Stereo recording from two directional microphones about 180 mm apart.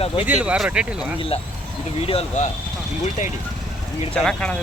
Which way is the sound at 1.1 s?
30° left (ahead or behind).